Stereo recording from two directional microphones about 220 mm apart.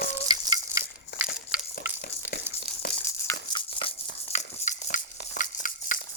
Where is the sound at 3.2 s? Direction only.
20° left (ahead or behind); by 5.4 s 35° left (ahead or behind).